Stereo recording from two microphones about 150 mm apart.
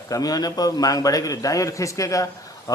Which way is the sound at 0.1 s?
25° left (ahead or behind).